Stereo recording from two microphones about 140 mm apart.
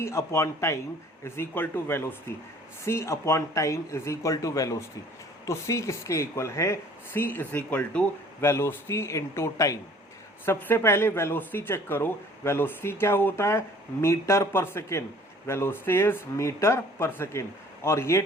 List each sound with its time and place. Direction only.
0.0 s speech: 20° left (ahead or behind)